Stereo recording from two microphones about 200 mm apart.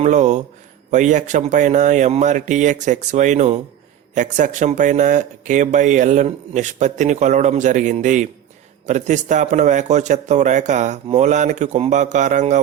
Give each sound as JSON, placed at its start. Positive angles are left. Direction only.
{"t": 0.0, "sound": "speech", "side_deg": -35}